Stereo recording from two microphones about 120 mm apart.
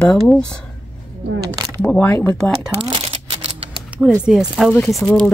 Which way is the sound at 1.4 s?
30° right (ahead or behind).